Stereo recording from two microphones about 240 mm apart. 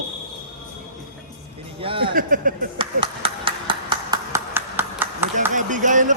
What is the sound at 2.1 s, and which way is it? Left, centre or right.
Speech, right.